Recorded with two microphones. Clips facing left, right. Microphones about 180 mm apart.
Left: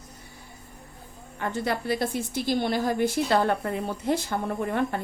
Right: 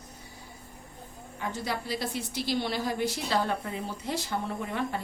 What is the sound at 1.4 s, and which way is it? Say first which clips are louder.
A woman's voice: left 5 dB; 60° left (ahead or behind).